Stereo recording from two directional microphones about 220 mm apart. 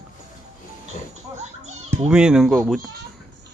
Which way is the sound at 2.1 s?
5° right (ahead or behind).